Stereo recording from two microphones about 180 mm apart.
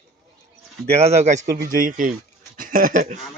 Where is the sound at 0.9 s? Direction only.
35° right (ahead or behind).